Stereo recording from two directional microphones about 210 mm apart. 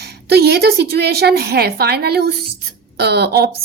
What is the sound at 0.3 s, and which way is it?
A woman's voice, 50° right (ahead or behind).